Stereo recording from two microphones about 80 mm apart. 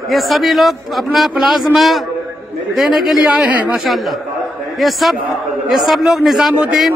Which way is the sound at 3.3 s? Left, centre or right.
Centre.